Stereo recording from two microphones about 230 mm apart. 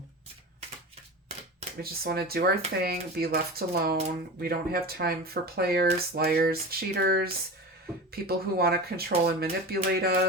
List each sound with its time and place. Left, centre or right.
1.8 s speech: right